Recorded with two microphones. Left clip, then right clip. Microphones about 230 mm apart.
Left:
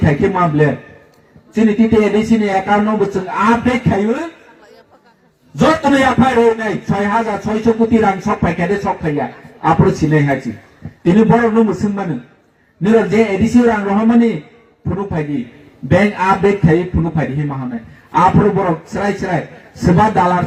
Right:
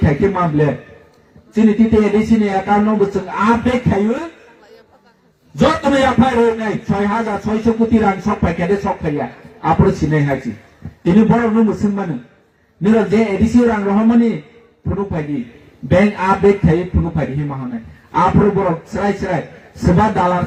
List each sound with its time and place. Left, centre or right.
0.0 s a man's voice: left
1.9 s a man's voice: left
5.7 s a man's voice: left